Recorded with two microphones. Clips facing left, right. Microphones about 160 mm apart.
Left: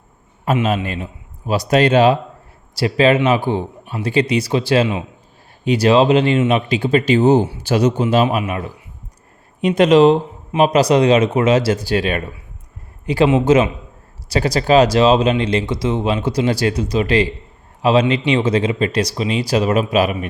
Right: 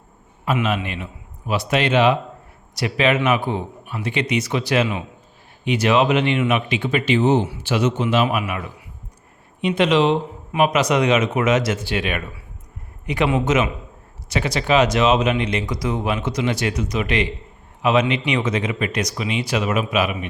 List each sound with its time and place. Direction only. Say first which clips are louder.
0.4 s speech: left 4 dB; 35° left (ahead or behind)
9.6 s speech: left 6 dB; 45° left (ahead or behind)